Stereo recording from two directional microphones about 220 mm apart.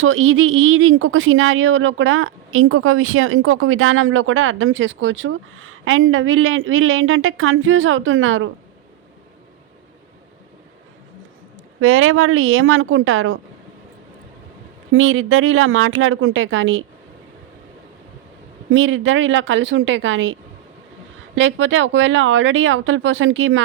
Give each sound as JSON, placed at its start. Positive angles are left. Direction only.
{"t": 0.0, "sound": "speech", "side_deg": -65}
{"t": 11.8, "sound": "speech", "side_deg": -70}
{"t": 14.9, "sound": "speech", "side_deg": -65}
{"t": 18.7, "sound": "speech", "side_deg": -60}
{"t": 21.3, "sound": "speech", "side_deg": -60}